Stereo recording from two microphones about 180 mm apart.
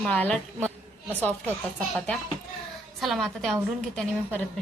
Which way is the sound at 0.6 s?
10° left (ahead or behind).